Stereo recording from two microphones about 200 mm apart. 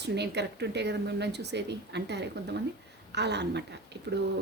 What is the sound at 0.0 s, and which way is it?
A woman's voice, 60° right (ahead or behind).